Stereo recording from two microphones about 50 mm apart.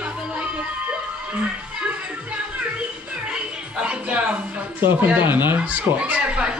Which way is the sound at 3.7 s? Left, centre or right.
Right.